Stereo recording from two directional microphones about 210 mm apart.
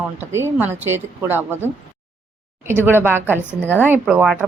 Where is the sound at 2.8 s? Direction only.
10° right (ahead or behind).